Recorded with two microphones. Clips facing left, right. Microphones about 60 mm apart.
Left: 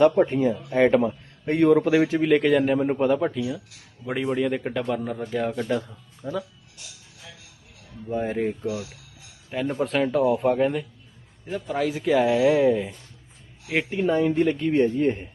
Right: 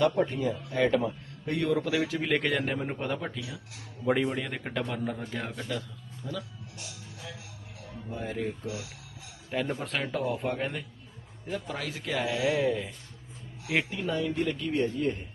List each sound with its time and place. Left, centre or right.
0.0 s speech: left
2.2 s a man's voice: centre
6.2 s speech: left
8.1 s speech: left
9.5 s a man's voice: centre
14.1 s speech: left